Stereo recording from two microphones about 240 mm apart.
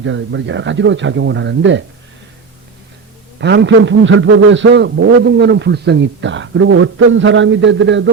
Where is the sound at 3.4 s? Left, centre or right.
Right.